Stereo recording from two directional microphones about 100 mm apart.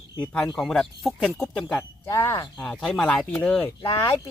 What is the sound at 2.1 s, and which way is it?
Speech, 25° left (ahead or behind).